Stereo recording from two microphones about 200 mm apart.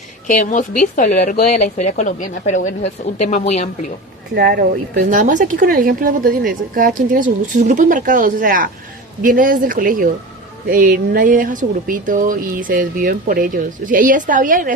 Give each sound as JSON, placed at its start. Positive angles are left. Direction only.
{"t": 0.3, "sound": "speech", "side_deg": 40}
{"t": 4.4, "sound": "speech", "side_deg": -50}